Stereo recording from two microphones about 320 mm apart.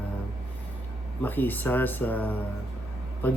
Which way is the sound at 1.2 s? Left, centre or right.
Centre.